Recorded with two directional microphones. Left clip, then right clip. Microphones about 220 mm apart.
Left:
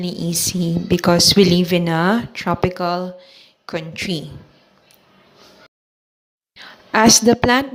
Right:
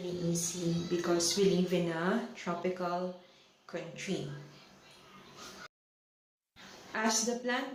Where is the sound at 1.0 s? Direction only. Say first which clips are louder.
Left 17 dB; 45° left (ahead or behind).